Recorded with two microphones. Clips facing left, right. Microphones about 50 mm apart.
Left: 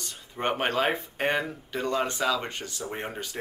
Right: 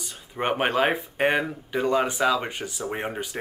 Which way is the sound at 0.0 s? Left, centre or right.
Centre.